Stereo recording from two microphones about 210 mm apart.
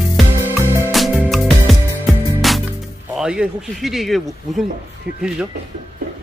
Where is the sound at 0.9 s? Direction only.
5° left (ahead or behind).